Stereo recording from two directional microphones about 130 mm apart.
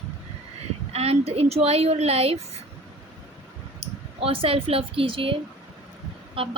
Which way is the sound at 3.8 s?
45° right (ahead or behind).